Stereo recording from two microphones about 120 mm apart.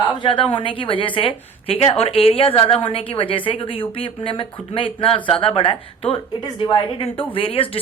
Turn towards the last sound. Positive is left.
turn(degrees=50)  # may be behind; listen again after turning